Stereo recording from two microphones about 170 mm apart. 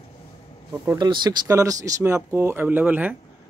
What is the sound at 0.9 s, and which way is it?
Speech, 25° right (ahead or behind).